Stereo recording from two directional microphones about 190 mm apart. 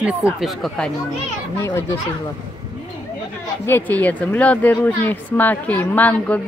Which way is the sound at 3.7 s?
10° left (ahead or behind).